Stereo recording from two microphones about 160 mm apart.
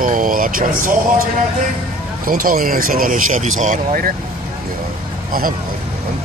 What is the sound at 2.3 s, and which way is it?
Speech, 60° right (ahead or behind).